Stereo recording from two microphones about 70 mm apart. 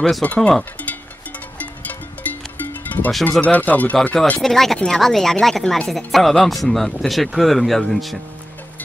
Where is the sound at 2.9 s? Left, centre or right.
Left.